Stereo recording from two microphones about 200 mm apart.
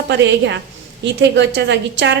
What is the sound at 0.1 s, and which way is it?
A woman's voice, 60° right (ahead or behind).